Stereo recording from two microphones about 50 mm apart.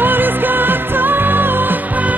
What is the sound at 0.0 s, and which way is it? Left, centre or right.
Music, right.